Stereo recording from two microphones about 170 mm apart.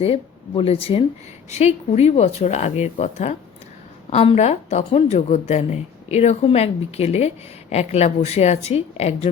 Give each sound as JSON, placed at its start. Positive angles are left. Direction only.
{"t": 0.0, "sound": "a woman's voice", "side_deg": 35}